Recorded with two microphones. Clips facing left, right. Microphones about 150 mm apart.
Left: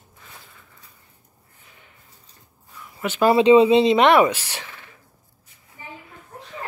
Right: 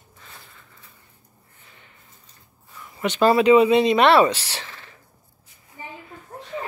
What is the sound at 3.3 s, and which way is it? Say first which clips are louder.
Speech: left 3 dB; 25° left (ahead or behind).